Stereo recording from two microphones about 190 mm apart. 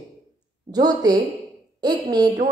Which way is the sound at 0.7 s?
20° right (ahead or behind).